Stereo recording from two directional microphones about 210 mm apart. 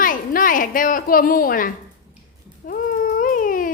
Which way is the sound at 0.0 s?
40° left (ahead or behind).